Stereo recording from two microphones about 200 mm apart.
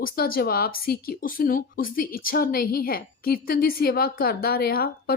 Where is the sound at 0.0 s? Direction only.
45° left (ahead or behind).